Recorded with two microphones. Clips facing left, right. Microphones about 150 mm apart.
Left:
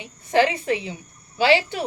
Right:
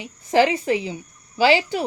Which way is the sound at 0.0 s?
30° right (ahead or behind).